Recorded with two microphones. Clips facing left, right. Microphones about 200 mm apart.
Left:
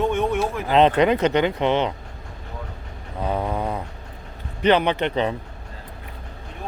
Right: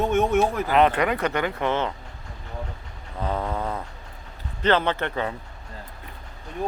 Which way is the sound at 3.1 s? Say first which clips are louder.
Left 3 dB; 15° left (ahead or behind).